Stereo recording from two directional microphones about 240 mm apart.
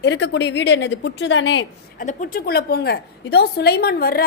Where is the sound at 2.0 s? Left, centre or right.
Left.